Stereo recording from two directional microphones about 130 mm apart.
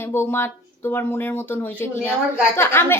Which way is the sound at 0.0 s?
20° left (ahead or behind).